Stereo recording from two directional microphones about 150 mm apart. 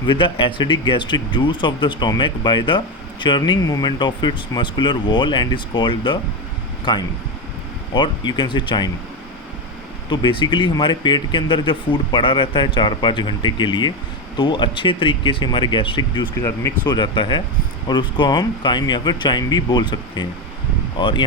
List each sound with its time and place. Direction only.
0.1 s speech: 35° left (ahead or behind)
10.1 s speech: 30° left (ahead or behind)